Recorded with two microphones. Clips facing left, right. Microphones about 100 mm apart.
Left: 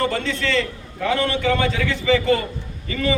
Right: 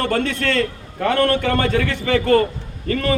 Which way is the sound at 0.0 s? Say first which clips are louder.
Right 2 dB; 55° right (ahead or behind).